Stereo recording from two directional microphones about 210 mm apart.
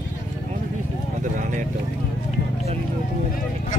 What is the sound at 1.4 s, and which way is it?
Vehicle, 35° right (ahead or behind).